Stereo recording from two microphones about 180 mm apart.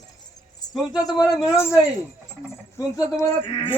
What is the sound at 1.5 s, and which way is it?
Speech, 15° left (ahead or behind).